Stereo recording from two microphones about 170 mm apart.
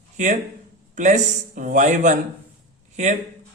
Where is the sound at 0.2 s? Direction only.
45° right (ahead or behind).